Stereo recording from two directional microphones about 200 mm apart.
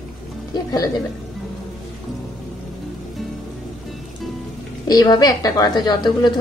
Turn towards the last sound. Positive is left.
turn(degrees=20)  # may be behind; listen again after turning